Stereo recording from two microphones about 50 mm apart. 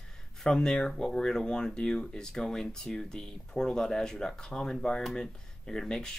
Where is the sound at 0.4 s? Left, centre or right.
Centre.